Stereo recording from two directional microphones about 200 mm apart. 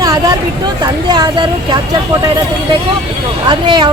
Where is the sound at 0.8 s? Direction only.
20° right (ahead or behind).